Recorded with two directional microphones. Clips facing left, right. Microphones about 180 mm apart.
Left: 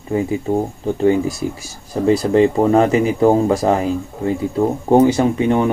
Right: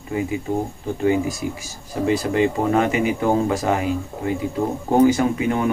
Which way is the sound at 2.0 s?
35° left (ahead or behind).